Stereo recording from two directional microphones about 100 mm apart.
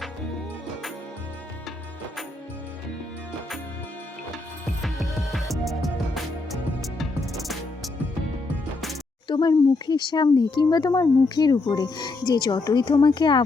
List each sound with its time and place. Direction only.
4.6 s music: centre (ahead or behind)
7.0 s music: centre (ahead or behind)
9.2 s speech: 50° left (ahead or behind)